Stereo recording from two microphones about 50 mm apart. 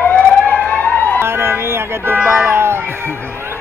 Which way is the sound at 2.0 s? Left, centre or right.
Right.